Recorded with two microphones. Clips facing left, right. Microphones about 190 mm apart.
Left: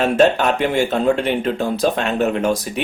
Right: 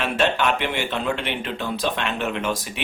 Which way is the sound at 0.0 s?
40° left (ahead or behind).